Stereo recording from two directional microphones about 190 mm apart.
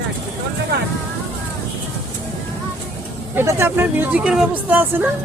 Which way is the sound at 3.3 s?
15° right (ahead or behind).